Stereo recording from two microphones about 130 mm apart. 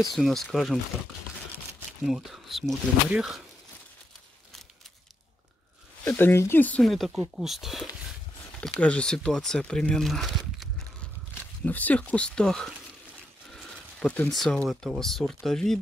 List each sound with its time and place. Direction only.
0.1 s speech: centre (ahead or behind)
2.0 s speech: centre (ahead or behind)
6.0 s speech: 15° left (ahead or behind)
6.8 s speech: centre (ahead or behind)
8.8 s speech: 5° left (ahead or behind)
11.6 s speech: 10° left (ahead or behind)
13.5 s a sound: 5° left (ahead or behind)
14.3 s speech: centre (ahead or behind)